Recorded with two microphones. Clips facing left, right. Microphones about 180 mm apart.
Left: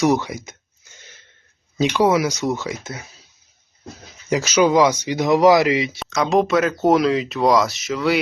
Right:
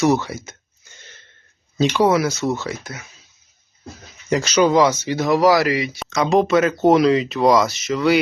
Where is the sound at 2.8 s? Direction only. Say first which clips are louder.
Left 2 dB; 30° left (ahead or behind).